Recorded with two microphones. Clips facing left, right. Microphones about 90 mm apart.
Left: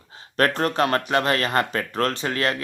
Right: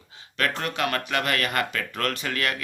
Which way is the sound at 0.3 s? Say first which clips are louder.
Left 6 dB; 40° left (ahead or behind).